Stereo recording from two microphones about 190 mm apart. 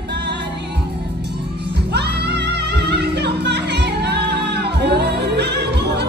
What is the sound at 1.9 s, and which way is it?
Music, 60° right (ahead or behind).